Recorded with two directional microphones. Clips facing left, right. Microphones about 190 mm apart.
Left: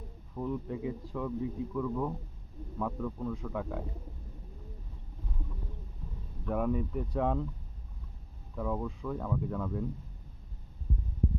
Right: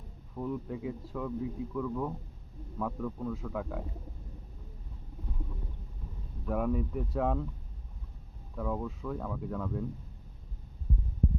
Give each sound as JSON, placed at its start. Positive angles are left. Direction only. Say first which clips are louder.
{"t": 0.3, "sound": "speech", "louder": "left 1 dB", "side_deg": 0}
{"t": 6.4, "sound": "speech", "louder": "even", "side_deg": 0}
{"t": 8.5, "sound": "speech", "louder": "even", "side_deg": 0}